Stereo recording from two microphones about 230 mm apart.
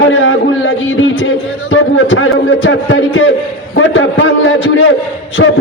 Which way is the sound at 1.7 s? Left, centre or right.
Left.